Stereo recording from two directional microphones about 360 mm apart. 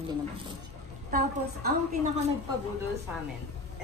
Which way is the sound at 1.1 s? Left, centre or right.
Right.